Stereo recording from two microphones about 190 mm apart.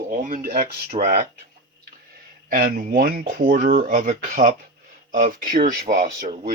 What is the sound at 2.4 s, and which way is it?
Speech, 50° right (ahead or behind).